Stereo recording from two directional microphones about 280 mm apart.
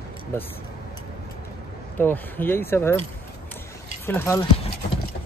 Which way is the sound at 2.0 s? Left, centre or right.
Centre.